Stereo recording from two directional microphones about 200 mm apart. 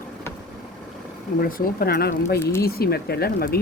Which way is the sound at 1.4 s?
45° left (ahead or behind).